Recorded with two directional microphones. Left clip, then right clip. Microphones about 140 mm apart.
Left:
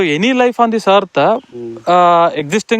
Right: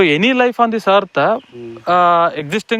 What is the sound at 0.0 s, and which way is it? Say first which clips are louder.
Speech: even; 20° left (ahead or behind).